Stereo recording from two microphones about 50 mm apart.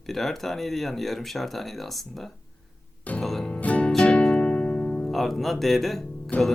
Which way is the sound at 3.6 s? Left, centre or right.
Left.